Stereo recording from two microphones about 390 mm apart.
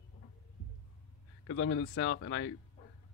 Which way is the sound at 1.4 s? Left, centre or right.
Left.